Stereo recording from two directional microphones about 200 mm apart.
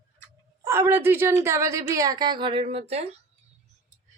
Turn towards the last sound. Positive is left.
turn(degrees=-30)  # may be behind; listen again after turning